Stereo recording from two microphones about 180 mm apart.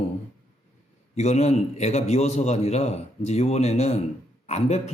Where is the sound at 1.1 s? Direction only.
40° left (ahead or behind).